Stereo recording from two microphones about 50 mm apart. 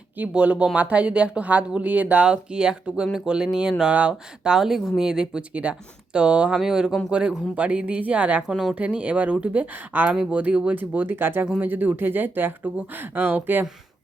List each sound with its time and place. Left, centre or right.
0.3 s speech: right
4.5 s speech: centre
7.1 s speech: right
8.4 s speech: centre
8.7 s speech: right
10.8 s speech: right